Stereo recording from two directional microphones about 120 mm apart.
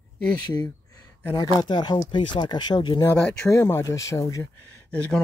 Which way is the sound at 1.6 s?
40° left (ahead or behind).